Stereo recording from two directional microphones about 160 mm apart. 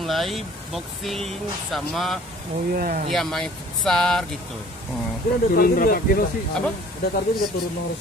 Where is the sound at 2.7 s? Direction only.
65° right (ahead or behind).